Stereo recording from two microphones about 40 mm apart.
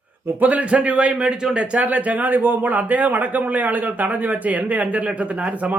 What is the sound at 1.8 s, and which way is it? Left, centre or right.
Speech, right.